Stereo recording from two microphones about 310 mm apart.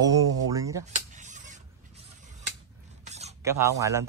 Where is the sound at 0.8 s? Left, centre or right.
Right.